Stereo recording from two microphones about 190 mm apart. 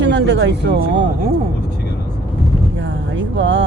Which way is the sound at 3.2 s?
75° right (ahead or behind).